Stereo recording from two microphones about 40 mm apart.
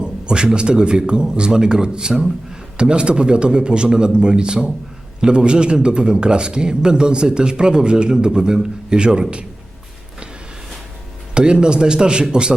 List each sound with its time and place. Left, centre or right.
0.0 s a man's voice: right
11.3 s a man's voice: right